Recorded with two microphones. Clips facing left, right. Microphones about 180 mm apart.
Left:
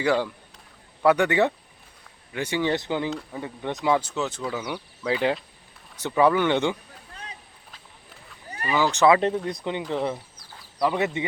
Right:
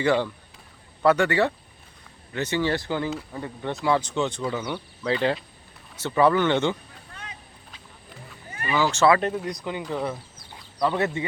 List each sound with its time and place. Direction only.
0.0 s speech: 10° left (ahead or behind)
4.1 s speech: 5° left (ahead or behind)
7.1 s vehicle: 35° left (ahead or behind)
8.4 s a sound: 35° left (ahead or behind)
8.7 s speech: 15° left (ahead or behind)
10.3 s chicken: 25° right (ahead or behind)
10.8 s speech: 15° left (ahead or behind)